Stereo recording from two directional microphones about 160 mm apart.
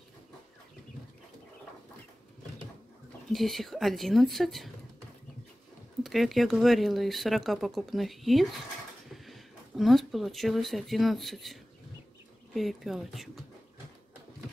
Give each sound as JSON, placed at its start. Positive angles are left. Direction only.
{"t": 3.3, "sound": "speech", "side_deg": 0}
{"t": 6.0, "sound": "speech", "side_deg": 0}
{"t": 12.5, "sound": "speech", "side_deg": 0}